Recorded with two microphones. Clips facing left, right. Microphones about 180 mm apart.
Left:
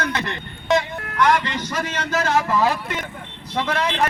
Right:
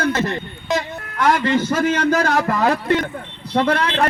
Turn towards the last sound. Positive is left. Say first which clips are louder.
# right 4 dB
turn(degrees=-60)  # may be behind; listen again after turning